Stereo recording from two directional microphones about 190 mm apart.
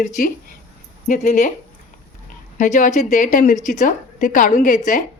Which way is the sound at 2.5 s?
40° left (ahead or behind).